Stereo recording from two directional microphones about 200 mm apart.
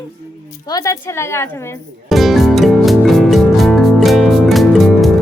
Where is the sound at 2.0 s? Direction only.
Centre (ahead or behind).